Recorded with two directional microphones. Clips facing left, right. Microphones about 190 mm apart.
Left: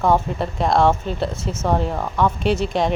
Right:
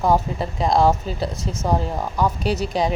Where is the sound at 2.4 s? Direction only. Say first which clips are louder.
Left 2 dB; centre (ahead or behind).